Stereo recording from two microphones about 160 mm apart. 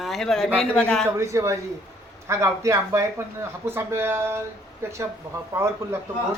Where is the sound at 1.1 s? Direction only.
20° right (ahead or behind).